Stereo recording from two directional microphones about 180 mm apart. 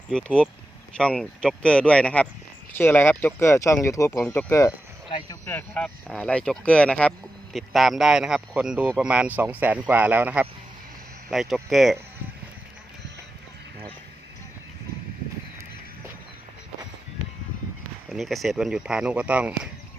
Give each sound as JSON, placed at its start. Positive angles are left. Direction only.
{"t": 0.1, "sound": "speech", "side_deg": 5}
{"t": 18.1, "sound": "speech", "side_deg": 0}